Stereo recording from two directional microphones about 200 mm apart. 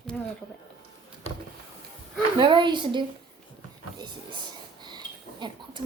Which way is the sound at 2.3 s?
25° right (ahead or behind).